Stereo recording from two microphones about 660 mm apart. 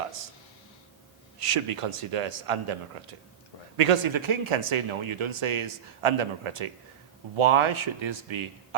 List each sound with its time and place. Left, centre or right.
1.4 s speech: right